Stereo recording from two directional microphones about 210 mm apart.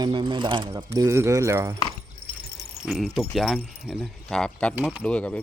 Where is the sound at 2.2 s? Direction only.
20° left (ahead or behind).